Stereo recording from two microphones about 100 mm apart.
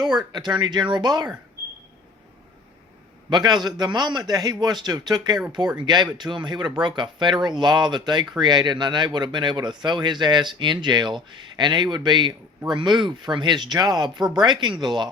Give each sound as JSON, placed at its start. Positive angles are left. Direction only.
{"t": 0.3, "sound": "speech", "side_deg": -45}
{"t": 3.2, "sound": "speech", "side_deg": -45}